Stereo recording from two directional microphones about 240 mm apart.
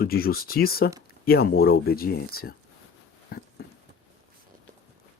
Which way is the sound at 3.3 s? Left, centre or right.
Left.